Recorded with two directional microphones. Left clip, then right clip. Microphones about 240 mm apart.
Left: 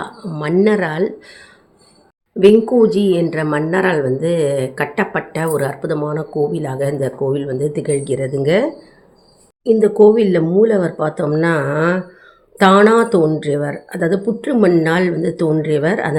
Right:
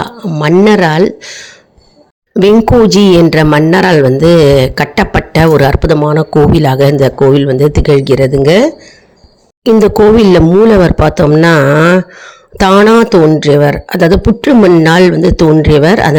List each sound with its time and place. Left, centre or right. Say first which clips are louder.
0.0 s speech: right 10 dB; right
2.9 s speech: right 10 dB; right